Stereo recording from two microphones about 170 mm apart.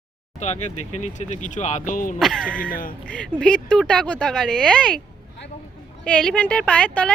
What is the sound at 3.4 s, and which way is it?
Speech, 5° left (ahead or behind).